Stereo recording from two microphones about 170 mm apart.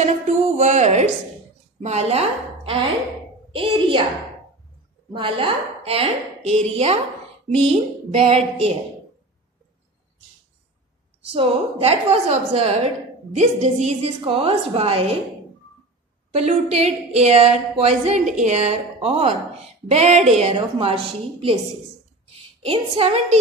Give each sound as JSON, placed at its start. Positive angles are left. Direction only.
{"t": 0.6, "sound": "a woman's voice", "side_deg": -45}
{"t": 5.1, "sound": "a woman's voice", "side_deg": -30}
{"t": 11.3, "sound": "a woman's voice", "side_deg": -35}
{"t": 16.3, "sound": "a woman's voice", "side_deg": -35}
{"t": 22.3, "sound": "a sound", "side_deg": -35}